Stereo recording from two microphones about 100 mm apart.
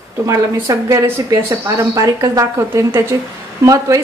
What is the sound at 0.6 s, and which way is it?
A woman's voice, 35° right (ahead or behind).